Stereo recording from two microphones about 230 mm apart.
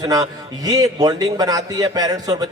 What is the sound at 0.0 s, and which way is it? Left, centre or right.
A man's voice, centre.